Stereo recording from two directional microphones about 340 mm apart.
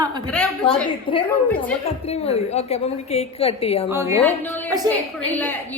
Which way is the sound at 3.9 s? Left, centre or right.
Centre.